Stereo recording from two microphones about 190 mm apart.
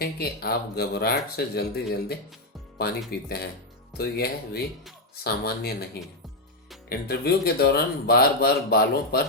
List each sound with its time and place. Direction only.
0.0 s speech: 55° left (ahead or behind)